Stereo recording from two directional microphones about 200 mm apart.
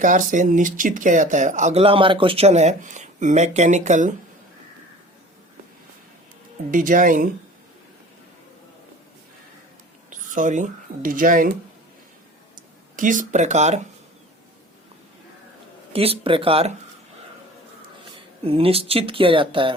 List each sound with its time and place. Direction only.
0.0 s speech: 40° right (ahead or behind)
6.7 s speech: 40° right (ahead or behind)
10.1 s speech: 40° right (ahead or behind)
12.5 s speech: 40° right (ahead or behind)
15.9 s speech: 30° right (ahead or behind)
17.8 s speech: 25° right (ahead or behind)